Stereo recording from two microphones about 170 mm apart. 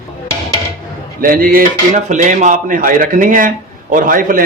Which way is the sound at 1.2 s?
55° right (ahead or behind).